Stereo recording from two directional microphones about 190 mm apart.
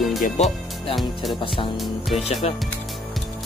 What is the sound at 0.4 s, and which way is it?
Speech, 35° left (ahead or behind).